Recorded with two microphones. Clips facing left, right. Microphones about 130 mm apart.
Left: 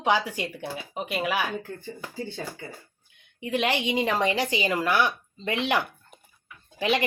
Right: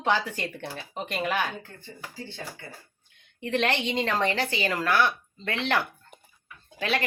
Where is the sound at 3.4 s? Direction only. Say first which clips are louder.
Even; 10° left (ahead or behind).